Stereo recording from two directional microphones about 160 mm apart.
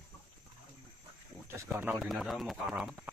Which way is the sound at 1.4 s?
15° right (ahead or behind).